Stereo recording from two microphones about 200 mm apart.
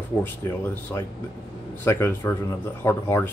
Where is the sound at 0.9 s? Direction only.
10° left (ahead or behind).